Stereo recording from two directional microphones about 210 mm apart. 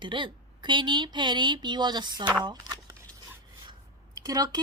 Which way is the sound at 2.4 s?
20° right (ahead or behind).